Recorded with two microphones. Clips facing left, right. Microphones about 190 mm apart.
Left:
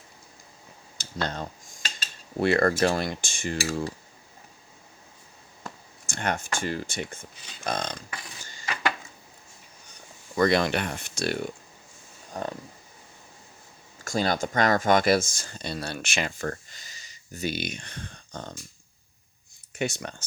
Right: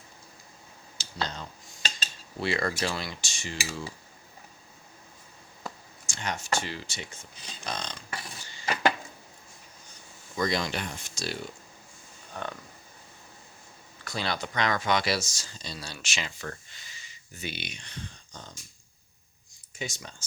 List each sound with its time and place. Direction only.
0.9 s a sound: 55° left (ahead or behind)
2.4 s speech: 55° left (ahead or behind)
6.1 s speech: 55° left (ahead or behind)
10.3 s speech: 60° left (ahead or behind)
12.3 s speech: 35° left (ahead or behind)
14.0 s speech: 45° left (ahead or behind)
19.7 s speech: 65° left (ahead or behind)